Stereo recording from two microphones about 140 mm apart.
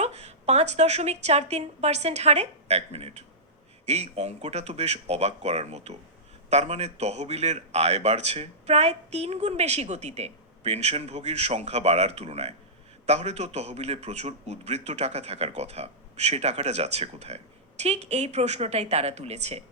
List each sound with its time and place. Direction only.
0.0 s a man's voice: 50° right (ahead or behind)